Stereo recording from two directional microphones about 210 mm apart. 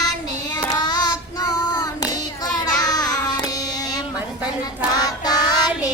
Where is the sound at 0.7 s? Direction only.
20° left (ahead or behind).